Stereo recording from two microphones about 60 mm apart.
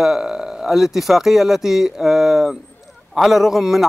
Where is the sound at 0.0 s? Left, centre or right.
Centre.